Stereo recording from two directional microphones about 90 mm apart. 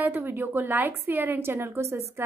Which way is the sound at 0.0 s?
25° right (ahead or behind).